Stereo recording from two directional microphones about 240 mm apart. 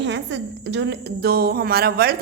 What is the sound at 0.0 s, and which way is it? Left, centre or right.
A woman's voice, right.